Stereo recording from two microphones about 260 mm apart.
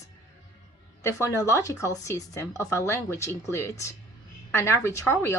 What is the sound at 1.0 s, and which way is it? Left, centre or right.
Speech, centre.